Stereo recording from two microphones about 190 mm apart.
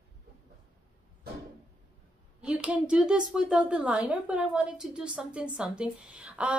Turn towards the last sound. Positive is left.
turn(degrees=-5)  # may be behind; listen again after turning